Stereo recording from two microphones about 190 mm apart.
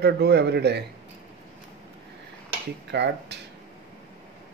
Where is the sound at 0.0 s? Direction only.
60° right (ahead or behind).